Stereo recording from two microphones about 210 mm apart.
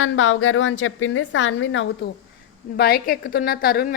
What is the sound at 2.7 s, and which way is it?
A woman's voice, 45° left (ahead or behind).